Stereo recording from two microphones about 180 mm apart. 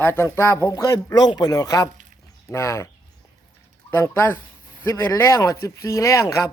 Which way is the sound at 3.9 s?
10° left (ahead or behind).